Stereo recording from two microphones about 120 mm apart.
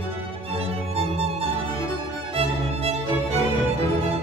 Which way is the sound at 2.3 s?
60° right (ahead or behind).